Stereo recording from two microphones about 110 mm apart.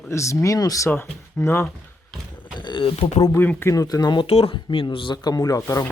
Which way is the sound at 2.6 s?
45° left (ahead or behind).